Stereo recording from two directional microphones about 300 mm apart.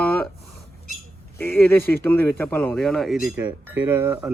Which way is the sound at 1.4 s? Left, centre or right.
Centre.